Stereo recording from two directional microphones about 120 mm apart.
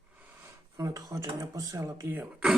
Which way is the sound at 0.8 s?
25° right (ahead or behind).